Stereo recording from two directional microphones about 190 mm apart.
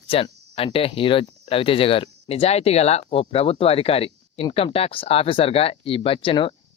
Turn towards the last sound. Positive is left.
turn(degrees=25)  # may be behind; listen again after turning